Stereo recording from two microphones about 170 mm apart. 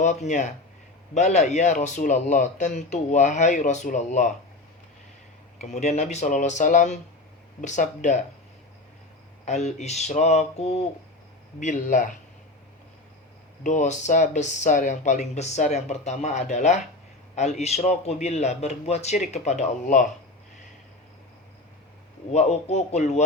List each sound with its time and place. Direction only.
0.0 s speech: 45° left (ahead or behind)
5.5 s speech: 40° left (ahead or behind)
9.5 s a man's voice: 40° left (ahead or behind)
13.7 s a man's voice: 45° left (ahead or behind)
22.3 s a man's voice: 40° left (ahead or behind)